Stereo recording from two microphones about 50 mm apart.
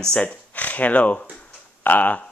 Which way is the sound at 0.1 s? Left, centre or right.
Left.